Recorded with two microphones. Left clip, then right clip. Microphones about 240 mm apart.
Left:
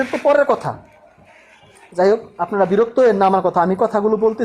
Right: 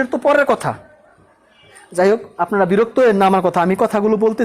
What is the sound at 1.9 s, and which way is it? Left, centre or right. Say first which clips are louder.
Speech: right 1 dB; right.